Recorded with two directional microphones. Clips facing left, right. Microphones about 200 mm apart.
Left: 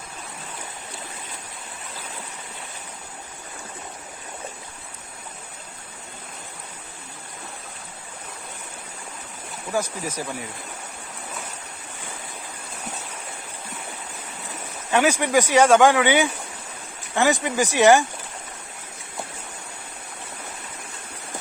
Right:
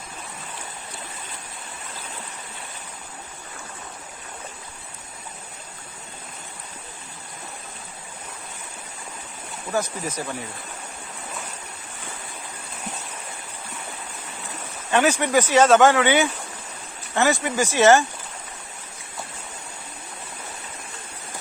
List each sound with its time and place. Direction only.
9.7 s speech: 10° left (ahead or behind)
14.8 s speech: 10° left (ahead or behind)